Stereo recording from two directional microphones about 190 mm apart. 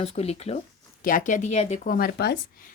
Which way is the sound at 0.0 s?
35° left (ahead or behind).